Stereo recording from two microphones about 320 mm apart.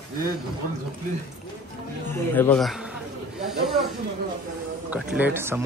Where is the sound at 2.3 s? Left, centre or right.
Centre.